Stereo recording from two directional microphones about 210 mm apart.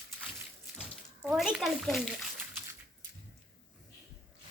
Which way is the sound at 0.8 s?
5° right (ahead or behind).